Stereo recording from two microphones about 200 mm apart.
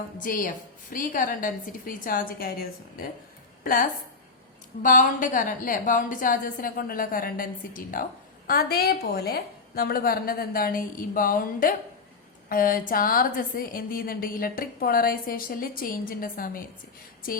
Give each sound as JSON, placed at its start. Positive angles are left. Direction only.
{"t": 0.2, "sound": "a woman's voice", "side_deg": 45}